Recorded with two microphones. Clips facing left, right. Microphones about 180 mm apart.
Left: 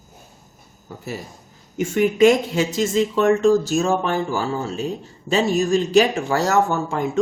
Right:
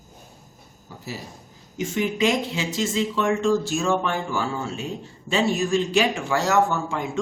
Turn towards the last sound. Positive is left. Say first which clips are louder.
# left 5 dB
turn(degrees=40)  # may be behind; listen again after turning